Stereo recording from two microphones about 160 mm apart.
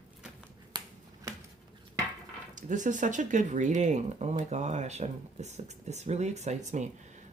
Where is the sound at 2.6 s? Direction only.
50° right (ahead or behind).